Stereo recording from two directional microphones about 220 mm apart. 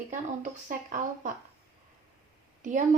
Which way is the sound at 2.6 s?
35° right (ahead or behind).